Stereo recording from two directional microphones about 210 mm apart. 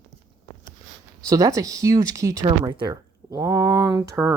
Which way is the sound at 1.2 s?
15° right (ahead or behind).